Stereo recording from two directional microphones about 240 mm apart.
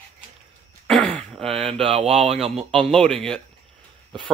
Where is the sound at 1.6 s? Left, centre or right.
Right.